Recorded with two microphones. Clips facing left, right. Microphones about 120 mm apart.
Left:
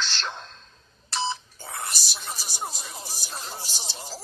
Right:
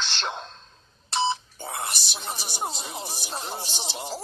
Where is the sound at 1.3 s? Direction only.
25° right (ahead or behind).